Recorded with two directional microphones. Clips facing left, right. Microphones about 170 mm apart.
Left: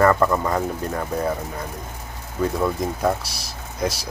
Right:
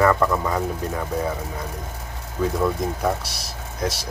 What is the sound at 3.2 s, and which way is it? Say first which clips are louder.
Speech: right 1 dB; centre (ahead or behind).